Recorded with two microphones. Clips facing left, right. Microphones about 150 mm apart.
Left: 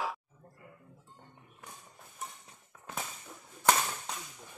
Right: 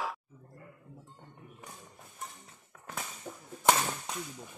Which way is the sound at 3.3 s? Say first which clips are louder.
Right 7 dB; 60° right (ahead or behind).